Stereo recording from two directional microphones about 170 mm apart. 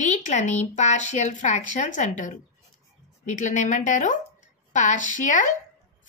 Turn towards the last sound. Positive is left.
turn(degrees=50)  # may be behind; listen again after turning